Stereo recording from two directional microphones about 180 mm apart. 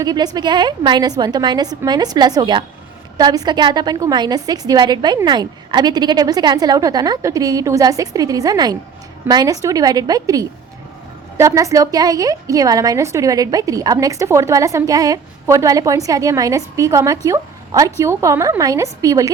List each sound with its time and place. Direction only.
0.0 s a woman's voice: 20° right (ahead or behind)